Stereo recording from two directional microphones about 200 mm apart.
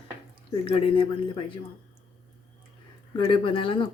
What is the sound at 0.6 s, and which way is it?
Speech, 25° left (ahead or behind).